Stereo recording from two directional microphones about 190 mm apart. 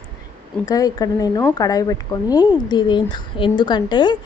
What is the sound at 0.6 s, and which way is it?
A woman's voice, 20° left (ahead or behind).